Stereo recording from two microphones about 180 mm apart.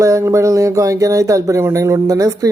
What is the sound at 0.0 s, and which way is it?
Speech, 15° right (ahead or behind).